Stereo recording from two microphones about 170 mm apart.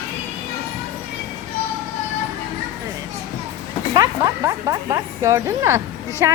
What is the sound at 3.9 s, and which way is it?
Speech, 20° right (ahead or behind).